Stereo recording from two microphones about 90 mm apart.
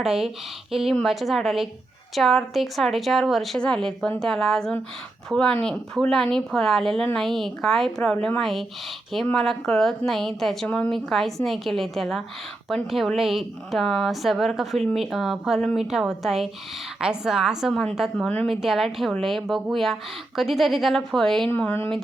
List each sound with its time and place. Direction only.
0.0 s a woman's voice: 5° right (ahead or behind)
10.7 s speech: 15° left (ahead or behind)
10.9 s a woman's voice: centre (ahead or behind)